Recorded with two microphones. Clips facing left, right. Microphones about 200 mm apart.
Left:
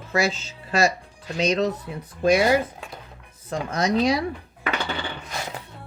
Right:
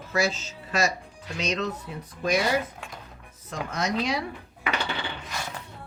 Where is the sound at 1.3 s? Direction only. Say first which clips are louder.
Left 7 dB; 35° left (ahead or behind).